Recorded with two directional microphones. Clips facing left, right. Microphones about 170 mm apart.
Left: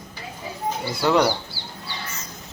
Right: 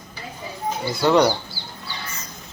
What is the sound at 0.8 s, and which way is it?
Speech, 5° left (ahead or behind).